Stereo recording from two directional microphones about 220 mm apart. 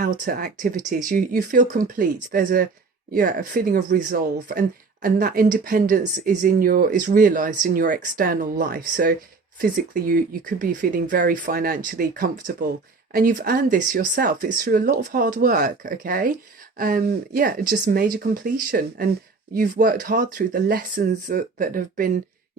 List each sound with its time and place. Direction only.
0.0 s speech: 40° right (ahead or behind)